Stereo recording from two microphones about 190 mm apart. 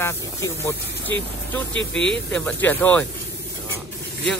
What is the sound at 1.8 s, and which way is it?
Speech, 75° left (ahead or behind).